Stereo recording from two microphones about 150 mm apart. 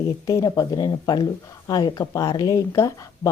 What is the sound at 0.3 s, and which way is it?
Speech, 20° left (ahead or behind).